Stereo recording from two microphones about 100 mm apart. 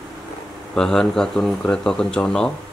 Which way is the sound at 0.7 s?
5° left (ahead or behind).